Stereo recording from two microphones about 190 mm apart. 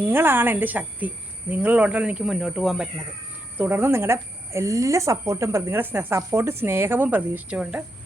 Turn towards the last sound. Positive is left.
turn(degrees=-5)  # may be behind; listen again after turning